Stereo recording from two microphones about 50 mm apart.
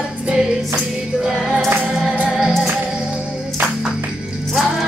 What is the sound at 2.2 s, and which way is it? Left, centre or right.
Music, centre.